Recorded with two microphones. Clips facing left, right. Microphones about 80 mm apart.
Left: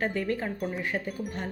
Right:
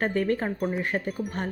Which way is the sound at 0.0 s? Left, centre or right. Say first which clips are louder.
Right 4 dB; right.